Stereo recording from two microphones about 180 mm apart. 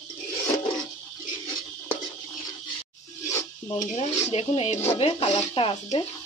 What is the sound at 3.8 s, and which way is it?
Speech, 35° left (ahead or behind).